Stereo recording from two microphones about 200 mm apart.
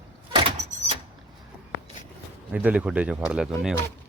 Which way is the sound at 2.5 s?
5° right (ahead or behind).